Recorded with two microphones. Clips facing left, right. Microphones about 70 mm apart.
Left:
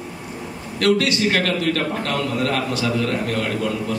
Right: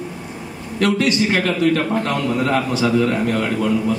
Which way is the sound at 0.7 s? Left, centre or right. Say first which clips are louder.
Right 1 dB; centre.